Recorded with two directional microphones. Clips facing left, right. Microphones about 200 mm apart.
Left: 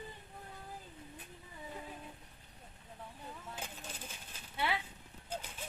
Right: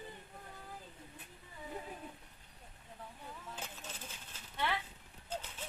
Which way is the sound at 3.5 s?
10° left (ahead or behind).